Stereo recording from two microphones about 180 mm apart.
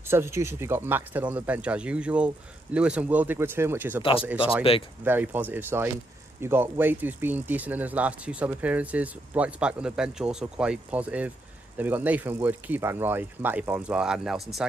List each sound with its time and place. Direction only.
0.0 s speech: 15° right (ahead or behind)
4.0 s speech: 30° left (ahead or behind)
5.0 s speech: 10° right (ahead or behind)